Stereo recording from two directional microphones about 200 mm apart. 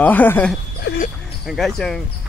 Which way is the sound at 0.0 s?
10° left (ahead or behind).